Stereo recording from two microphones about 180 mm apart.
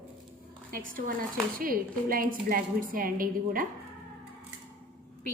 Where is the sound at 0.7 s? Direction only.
50° right (ahead or behind).